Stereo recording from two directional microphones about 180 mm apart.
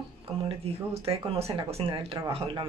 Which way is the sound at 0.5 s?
35° right (ahead or behind).